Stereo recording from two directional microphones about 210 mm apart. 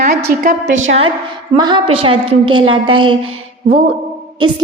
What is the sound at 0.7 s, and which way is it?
Speech, 65° right (ahead or behind).